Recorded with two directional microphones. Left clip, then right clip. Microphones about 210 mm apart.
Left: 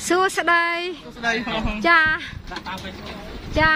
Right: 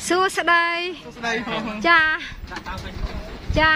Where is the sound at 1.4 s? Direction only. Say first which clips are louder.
Right 2 dB; centre (ahead or behind).